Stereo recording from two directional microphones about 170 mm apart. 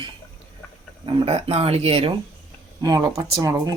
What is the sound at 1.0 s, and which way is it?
Speech, 35° right (ahead or behind).